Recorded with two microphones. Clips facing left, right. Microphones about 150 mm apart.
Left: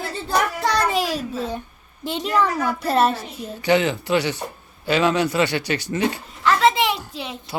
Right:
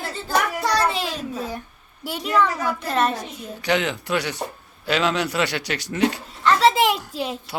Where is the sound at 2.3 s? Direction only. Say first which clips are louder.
Even; 35° left (ahead or behind).